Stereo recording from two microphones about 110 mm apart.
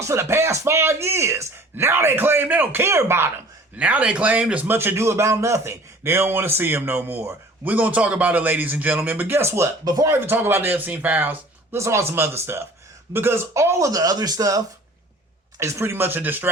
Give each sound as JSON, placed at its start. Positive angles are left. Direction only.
{"t": 0.0, "sound": "speech", "side_deg": -25}